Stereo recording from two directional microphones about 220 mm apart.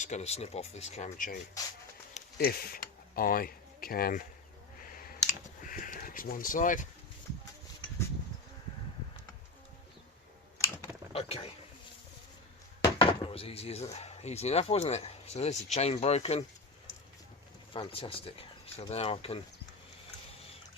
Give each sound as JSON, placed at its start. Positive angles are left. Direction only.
{"t": 0.0, "sound": "speech", "side_deg": 30}
{"t": 2.4, "sound": "speech", "side_deg": 45}
{"t": 5.3, "sound": "a sound", "side_deg": 40}
{"t": 11.1, "sound": "a sound", "side_deg": 25}
{"t": 12.8, "sound": "speech", "side_deg": 20}
{"t": 17.7, "sound": "speech", "side_deg": 25}